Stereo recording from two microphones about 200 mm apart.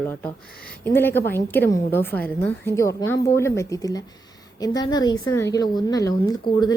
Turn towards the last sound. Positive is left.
turn(degrees=20)  # may be behind; listen again after turning